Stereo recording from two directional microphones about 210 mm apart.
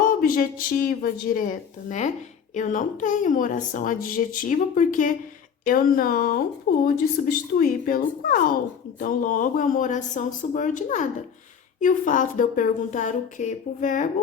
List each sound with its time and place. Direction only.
0.0 s speech: 40° left (ahead or behind)